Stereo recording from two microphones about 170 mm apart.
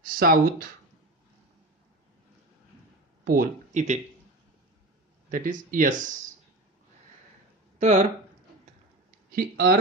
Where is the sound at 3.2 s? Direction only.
55° right (ahead or behind).